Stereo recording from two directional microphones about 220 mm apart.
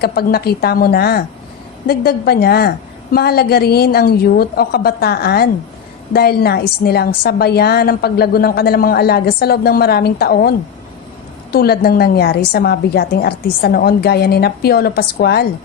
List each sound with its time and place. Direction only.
0.0 s a woman's voice: 45° left (ahead or behind)
11.5 s a woman's voice: 45° left (ahead or behind)